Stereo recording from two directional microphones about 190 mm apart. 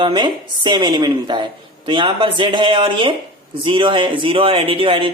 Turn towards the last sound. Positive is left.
turn(degrees=-25)  # may be behind; listen again after turning